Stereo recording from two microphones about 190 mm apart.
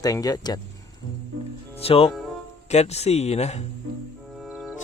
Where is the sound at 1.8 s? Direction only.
30° left (ahead or behind).